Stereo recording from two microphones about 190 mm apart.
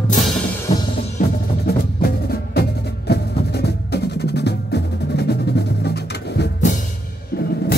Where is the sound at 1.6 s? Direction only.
55° left (ahead or behind).